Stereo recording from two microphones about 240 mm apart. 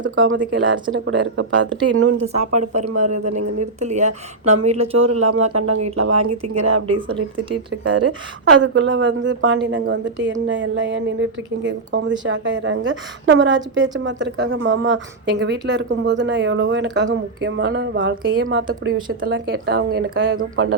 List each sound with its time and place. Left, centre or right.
0.2 s a woman's voice: right
2.2 s speech: right
5.2 s speech: right
6.5 s speech: right
6.8 s speech: right
8.6 s a woman's voice: right
19.0 s a woman's voice: right
20.3 s speech: right